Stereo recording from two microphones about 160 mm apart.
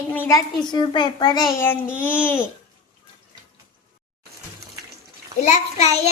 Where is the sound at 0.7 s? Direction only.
25° left (ahead or behind).